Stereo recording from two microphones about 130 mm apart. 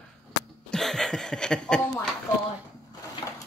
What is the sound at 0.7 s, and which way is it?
Chuckle, 5° left (ahead or behind).